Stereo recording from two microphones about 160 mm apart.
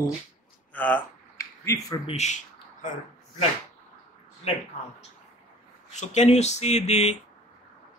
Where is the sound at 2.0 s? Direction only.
45° left (ahead or behind).